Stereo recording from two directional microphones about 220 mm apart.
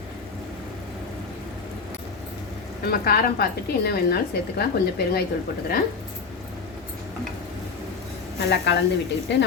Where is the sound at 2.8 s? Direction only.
45° left (ahead or behind).